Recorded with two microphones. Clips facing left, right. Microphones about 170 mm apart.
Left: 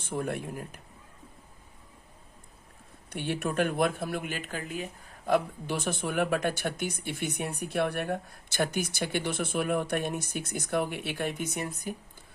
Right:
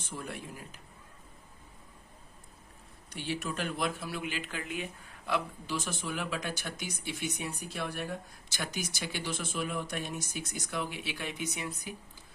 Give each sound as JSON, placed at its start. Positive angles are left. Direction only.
{"t": 0.0, "sound": "speech", "side_deg": 55}
{"t": 3.1, "sound": "speech", "side_deg": 55}